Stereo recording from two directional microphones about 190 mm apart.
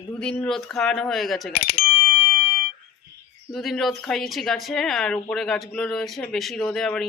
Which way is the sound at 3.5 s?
Centre (ahead or behind).